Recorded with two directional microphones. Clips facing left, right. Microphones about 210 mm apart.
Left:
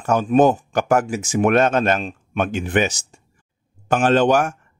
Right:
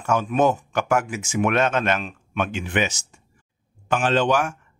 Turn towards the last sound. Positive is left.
turn(degrees=45)  # may be behind; listen again after turning